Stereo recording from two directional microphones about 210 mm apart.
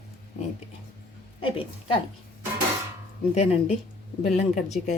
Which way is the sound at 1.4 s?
25° left (ahead or behind).